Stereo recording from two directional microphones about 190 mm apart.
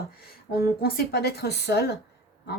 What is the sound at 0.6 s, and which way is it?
Speech, 55° left (ahead or behind).